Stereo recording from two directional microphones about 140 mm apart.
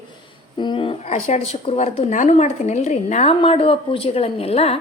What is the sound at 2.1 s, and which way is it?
A woman's voice, 60° left (ahead or behind).